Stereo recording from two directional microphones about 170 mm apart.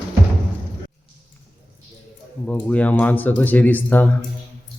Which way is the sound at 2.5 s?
10° left (ahead or behind).